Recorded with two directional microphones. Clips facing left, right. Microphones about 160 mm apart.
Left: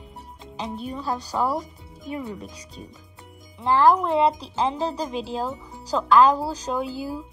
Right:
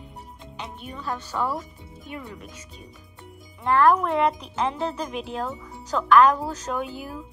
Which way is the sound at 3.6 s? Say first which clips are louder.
Left 1 dB; 30° left (ahead or behind).